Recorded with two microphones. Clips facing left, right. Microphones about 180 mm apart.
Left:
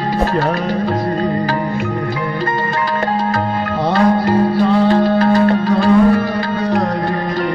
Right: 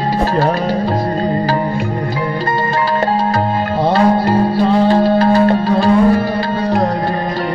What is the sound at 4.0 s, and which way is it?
Music, 30° right (ahead or behind).